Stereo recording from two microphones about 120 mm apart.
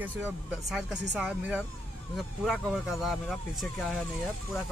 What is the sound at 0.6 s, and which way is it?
Speech, centre (ahead or behind).